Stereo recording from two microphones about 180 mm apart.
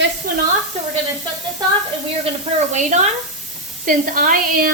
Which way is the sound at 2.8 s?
40° right (ahead or behind).